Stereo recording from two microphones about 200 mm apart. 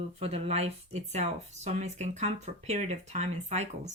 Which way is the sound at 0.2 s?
30° right (ahead or behind).